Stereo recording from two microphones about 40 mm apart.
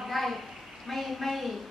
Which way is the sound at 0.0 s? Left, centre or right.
Centre.